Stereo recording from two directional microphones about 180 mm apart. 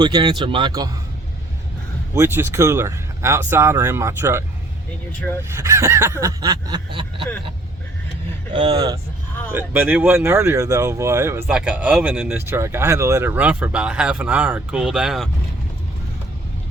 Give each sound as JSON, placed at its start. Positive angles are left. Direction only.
{"t": 0.0, "sound": "speech", "side_deg": -25}
{"t": 2.1, "sound": "speech", "side_deg": -15}
{"t": 8.5, "sound": "speech", "side_deg": -20}
{"t": 9.5, "sound": "speech", "side_deg": -10}